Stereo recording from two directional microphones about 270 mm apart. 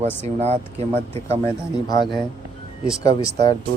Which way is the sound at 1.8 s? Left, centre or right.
Centre.